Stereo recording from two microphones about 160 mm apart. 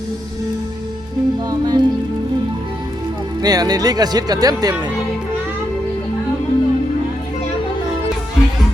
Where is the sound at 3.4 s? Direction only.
25° right (ahead or behind).